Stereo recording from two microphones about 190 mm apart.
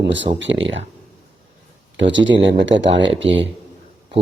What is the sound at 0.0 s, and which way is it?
Speech, 75° right (ahead or behind).